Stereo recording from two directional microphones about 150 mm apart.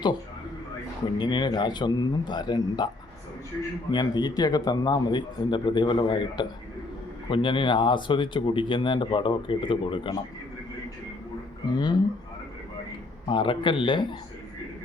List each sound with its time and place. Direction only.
1.2 s speech: 30° left (ahead or behind)
3.9 s speech: 30° left (ahead or behind)
11.7 s speech: 30° left (ahead or behind)
13.2 s speech: 35° left (ahead or behind)